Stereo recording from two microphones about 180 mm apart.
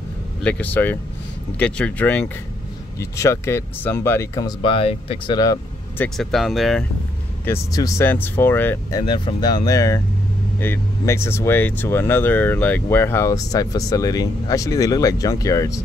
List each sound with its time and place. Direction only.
0.4 s speech: 10° left (ahead or behind)
6.0 s speech: centre (ahead or behind)
7.4 s speech: 15° left (ahead or behind)
9.0 s speech: 25° left (ahead or behind)